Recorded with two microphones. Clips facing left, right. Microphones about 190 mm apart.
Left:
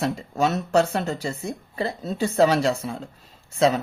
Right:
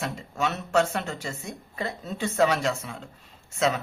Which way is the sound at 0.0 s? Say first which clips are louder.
Left 6 dB; 35° left (ahead or behind).